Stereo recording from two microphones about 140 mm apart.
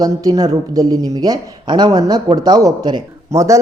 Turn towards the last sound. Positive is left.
turn(degrees=-20)  # may be behind; listen again after turning